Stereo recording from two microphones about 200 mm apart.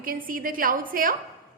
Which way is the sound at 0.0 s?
45° right (ahead or behind).